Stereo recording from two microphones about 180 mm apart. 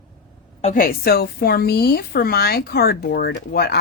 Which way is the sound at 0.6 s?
50° left (ahead or behind).